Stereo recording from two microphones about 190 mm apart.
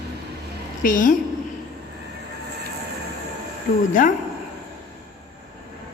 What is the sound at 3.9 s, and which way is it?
Speech, 45° left (ahead or behind).